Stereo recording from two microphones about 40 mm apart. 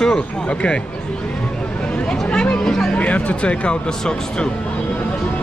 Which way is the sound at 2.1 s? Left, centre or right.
Left.